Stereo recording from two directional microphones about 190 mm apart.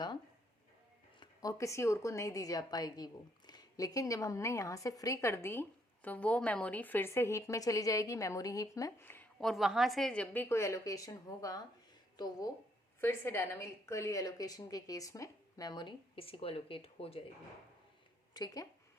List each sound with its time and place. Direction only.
1.2 s a woman's voice: 20° left (ahead or behind)
18.3 s a woman's voice: 20° left (ahead or behind)